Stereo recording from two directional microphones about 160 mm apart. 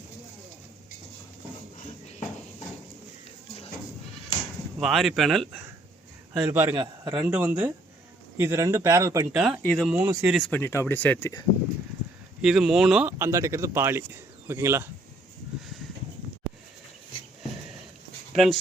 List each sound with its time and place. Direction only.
1.8 s a sound: 45° left (ahead or behind)
4.8 s speech: centre (ahead or behind)
6.3 s speech: 15° right (ahead or behind)
9.4 s speech: centre (ahead or behind)
9.9 s speech: 10° right (ahead or behind)
10.3 s speech: 5° left (ahead or behind)
10.6 s speech: 15° left (ahead or behind)
12.4 s speech: 5° right (ahead or behind)
18.3 s speech: centre (ahead or behind)